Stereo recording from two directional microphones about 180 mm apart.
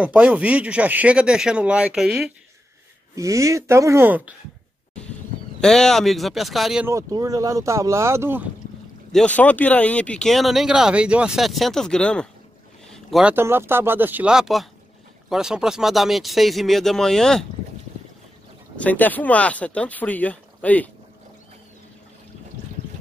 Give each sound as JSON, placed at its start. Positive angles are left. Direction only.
{"t": 0.0, "sound": "speech", "side_deg": -10}
{"t": 3.2, "sound": "speech", "side_deg": -15}
{"t": 5.6, "sound": "speech", "side_deg": 5}
{"t": 6.9, "sound": "speech", "side_deg": -20}
{"t": 9.1, "sound": "speech", "side_deg": 5}
{"t": 18.8, "sound": "speech", "side_deg": 10}